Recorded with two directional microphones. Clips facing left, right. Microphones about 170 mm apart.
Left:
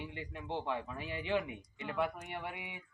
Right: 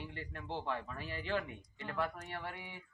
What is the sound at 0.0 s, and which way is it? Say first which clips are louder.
Speech: left 2 dB; 15° left (ahead or behind).